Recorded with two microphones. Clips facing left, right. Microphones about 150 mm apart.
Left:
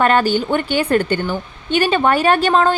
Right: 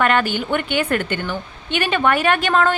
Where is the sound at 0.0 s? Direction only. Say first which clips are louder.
Left 4 dB; 35° left (ahead or behind).